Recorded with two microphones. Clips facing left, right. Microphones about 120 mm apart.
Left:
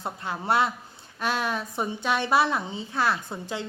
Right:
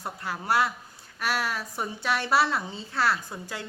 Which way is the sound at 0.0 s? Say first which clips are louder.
Left 2 dB; 20° left (ahead or behind).